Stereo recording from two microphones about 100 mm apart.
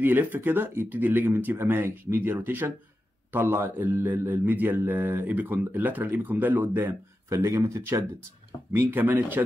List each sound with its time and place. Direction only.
0.0 s a man's voice: 20° right (ahead or behind)